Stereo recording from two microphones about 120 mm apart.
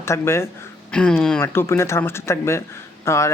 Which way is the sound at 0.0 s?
20° left (ahead or behind).